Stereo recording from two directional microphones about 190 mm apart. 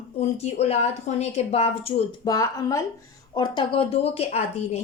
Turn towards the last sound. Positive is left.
turn(degrees=35)  # may be behind; listen again after turning